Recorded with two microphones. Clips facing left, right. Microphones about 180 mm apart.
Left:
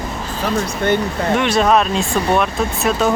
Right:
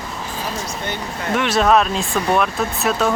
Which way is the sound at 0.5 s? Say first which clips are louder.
Left 9 dB; 55° left (ahead or behind).